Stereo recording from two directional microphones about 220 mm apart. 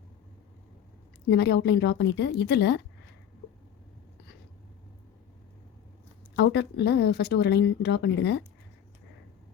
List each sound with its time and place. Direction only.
1.3 s speech: 45° left (ahead or behind)
6.3 s speech: 50° left (ahead or behind)